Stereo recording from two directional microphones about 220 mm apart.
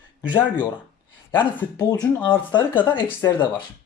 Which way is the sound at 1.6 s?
15° left (ahead or behind).